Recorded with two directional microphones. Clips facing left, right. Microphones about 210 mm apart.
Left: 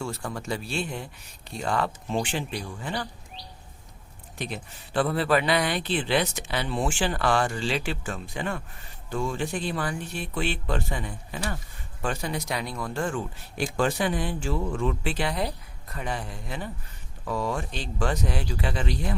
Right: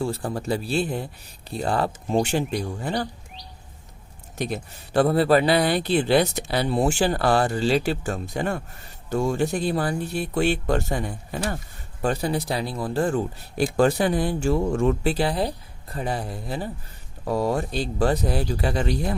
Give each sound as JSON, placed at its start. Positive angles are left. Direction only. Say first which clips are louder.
{"t": 0.0, "sound": "speech", "louder": "right 6 dB", "side_deg": -35}
{"t": 4.4, "sound": "speech", "louder": "right 6 dB", "side_deg": -40}